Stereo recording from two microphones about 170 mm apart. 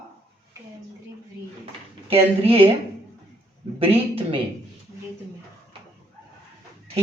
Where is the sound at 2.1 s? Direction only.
35° right (ahead or behind).